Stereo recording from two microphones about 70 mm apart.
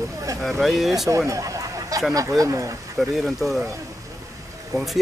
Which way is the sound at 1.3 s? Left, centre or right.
Right.